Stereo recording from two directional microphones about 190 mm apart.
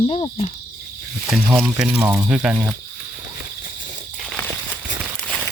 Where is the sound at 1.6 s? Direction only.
5° right (ahead or behind).